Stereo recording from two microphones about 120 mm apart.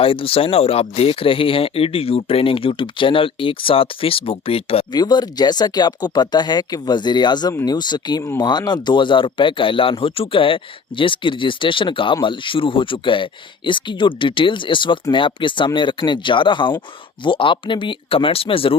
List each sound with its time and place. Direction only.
0.0 s speech: 50° left (ahead or behind)
4.9 s speech: 35° left (ahead or behind)